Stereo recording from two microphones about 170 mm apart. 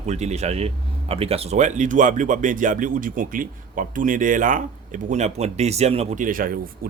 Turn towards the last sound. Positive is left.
turn(degrees=-60)  # may be behind; listen again after turning